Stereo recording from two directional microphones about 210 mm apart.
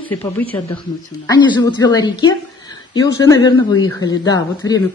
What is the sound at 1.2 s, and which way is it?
A woman's voice, 20° left (ahead or behind).